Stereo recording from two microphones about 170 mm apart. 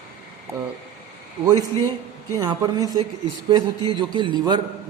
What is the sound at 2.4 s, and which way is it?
Speech, 20° right (ahead or behind).